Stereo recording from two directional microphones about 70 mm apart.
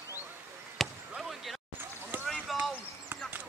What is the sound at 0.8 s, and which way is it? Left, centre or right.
Basketball bounce, centre.